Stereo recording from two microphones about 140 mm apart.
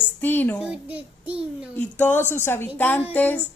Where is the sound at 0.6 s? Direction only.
5° right (ahead or behind).